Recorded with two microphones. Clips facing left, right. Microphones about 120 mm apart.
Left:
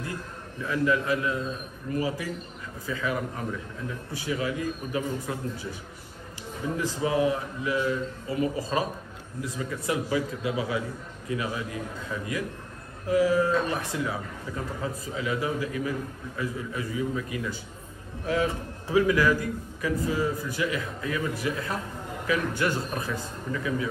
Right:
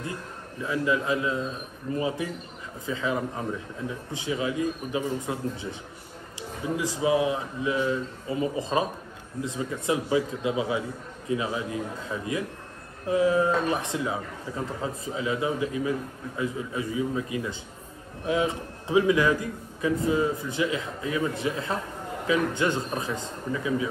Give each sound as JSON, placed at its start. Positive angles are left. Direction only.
{"t": 0.6, "sound": "a man's voice", "side_deg": -20}
{"t": 6.8, "sound": "a man's voice", "side_deg": -15}